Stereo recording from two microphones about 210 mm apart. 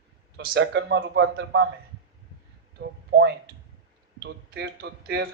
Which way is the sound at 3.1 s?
50° right (ahead or behind).